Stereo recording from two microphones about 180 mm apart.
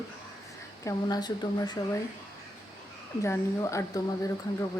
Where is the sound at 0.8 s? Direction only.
20° left (ahead or behind).